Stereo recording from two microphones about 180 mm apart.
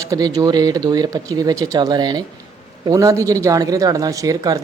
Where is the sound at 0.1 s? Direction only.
20° right (ahead or behind).